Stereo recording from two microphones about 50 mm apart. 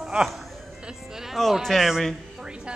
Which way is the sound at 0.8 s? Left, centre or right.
Centre.